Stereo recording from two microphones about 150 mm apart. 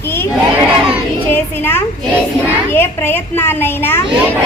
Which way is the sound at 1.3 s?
15° left (ahead or behind).